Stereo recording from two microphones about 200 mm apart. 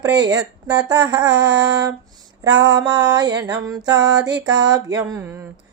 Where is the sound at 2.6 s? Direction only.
20° right (ahead or behind).